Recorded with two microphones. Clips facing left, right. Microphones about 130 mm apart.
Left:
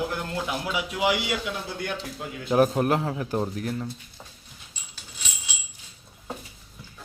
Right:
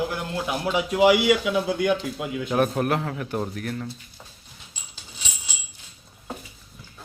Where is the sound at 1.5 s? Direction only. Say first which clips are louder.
Right 10 dB; 90° right.